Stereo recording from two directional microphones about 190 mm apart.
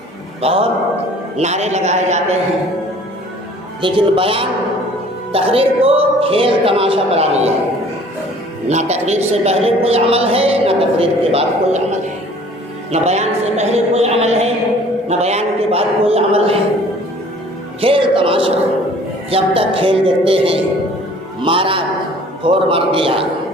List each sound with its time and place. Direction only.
0.4 s speech: 30° right (ahead or behind)
3.8 s speech: 25° right (ahead or behind)
8.6 s speech: 35° right (ahead or behind)
17.7 s speech: 30° right (ahead or behind)